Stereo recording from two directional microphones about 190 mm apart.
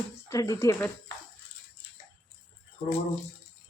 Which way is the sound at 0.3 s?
20° left (ahead or behind).